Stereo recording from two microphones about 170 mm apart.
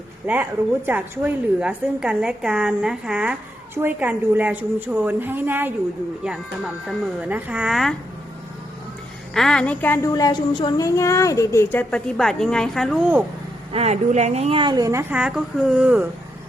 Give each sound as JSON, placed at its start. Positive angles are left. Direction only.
{"t": 0.3, "sound": "a woman's voice", "side_deg": -15}
{"t": 6.8, "sound": "a woman's voice", "side_deg": -10}
{"t": 9.3, "sound": "a woman's voice", "side_deg": 5}
{"t": 13.7, "sound": "speech", "side_deg": -40}
{"t": 15.1, "sound": "a woman's voice", "side_deg": -5}